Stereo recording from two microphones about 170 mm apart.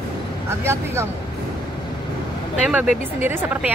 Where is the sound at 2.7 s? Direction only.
10° right (ahead or behind).